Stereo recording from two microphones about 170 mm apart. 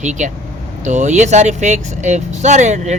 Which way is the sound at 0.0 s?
45° right (ahead or behind).